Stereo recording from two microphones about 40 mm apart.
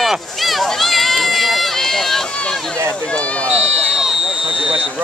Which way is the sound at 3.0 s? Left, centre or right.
Left.